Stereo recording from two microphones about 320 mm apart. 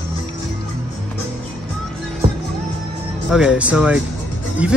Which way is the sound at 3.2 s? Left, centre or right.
Centre.